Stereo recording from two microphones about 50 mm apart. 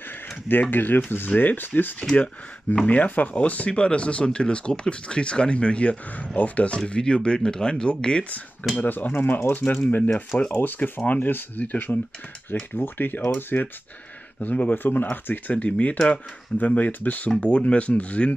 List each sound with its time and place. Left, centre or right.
0.5 s speech: left
8.7 s speech: left
14.4 s speech: left